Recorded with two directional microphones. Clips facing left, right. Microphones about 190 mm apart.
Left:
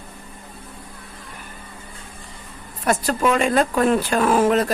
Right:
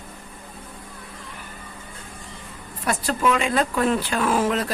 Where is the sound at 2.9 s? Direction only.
45° left (ahead or behind).